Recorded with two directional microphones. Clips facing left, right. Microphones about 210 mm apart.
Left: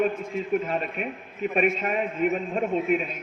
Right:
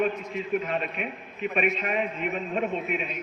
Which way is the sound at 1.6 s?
45° left (ahead or behind).